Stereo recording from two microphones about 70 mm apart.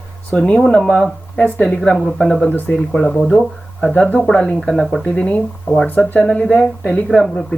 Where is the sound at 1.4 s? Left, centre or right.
Left.